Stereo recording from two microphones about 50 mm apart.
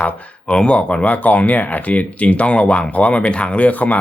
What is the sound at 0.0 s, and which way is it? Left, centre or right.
Speech, centre.